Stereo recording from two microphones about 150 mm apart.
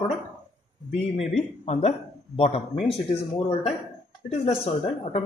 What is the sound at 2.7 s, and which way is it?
Speech, centre (ahead or behind).